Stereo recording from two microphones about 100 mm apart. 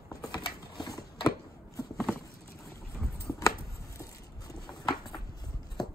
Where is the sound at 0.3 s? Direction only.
45° left (ahead or behind).